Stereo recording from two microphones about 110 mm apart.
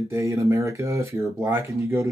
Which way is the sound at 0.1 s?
25° right (ahead or behind).